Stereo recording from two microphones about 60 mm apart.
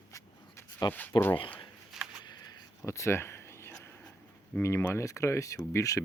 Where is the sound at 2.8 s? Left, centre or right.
Left.